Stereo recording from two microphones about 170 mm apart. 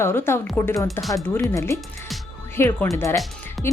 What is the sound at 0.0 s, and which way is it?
A woman's voice, 15° left (ahead or behind).